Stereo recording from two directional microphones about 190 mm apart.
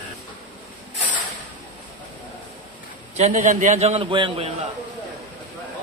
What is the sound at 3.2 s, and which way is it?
A man's voice, 40° right (ahead or behind).